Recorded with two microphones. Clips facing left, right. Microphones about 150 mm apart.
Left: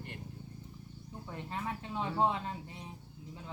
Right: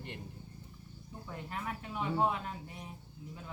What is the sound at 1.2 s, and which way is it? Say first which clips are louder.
Speech: left 1 dB; 25° left (ahead or behind).